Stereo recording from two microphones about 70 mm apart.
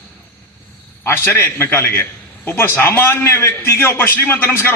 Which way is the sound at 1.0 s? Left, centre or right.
Left.